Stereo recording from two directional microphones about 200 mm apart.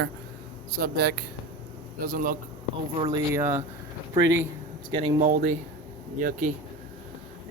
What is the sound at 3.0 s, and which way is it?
Speech, 10° right (ahead or behind).